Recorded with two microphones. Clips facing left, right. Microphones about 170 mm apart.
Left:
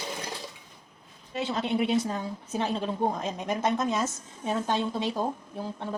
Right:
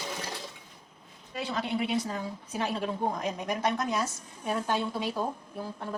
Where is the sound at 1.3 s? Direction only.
25° left (ahead or behind).